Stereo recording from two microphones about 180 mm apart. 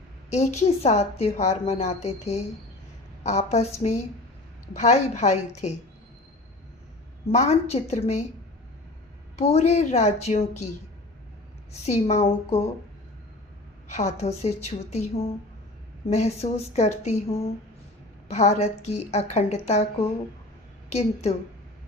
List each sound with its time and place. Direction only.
0.3 s a woman's voice: 40° left (ahead or behind)
7.3 s a woman's voice: 35° left (ahead or behind)
9.4 s a woman's voice: 35° left (ahead or behind)
11.7 s a woman's voice: 40° left (ahead or behind)
13.8 s a woman's voice: 35° left (ahead or behind)